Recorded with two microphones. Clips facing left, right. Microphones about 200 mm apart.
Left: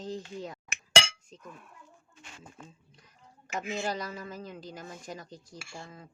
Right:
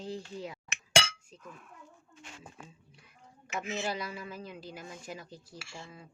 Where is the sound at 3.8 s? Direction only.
45° left (ahead or behind).